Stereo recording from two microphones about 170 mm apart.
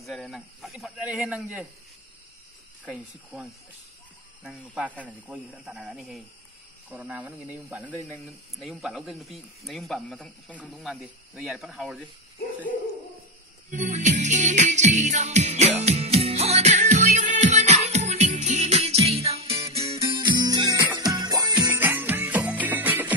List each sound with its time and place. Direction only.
0.0 s speech: centre (ahead or behind)
2.8 s speech: 5° right (ahead or behind)
7.9 s speech: 5° left (ahead or behind)
13.7 s music: 45° right (ahead or behind); by 21.6 s 25° right (ahead or behind)
21.6 s music: 10° right (ahead or behind)